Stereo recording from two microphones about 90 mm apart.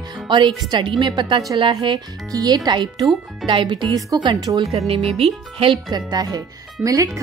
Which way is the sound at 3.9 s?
45° right (ahead or behind).